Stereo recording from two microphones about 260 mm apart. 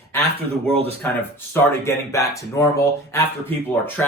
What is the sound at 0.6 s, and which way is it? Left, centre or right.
Speech, right.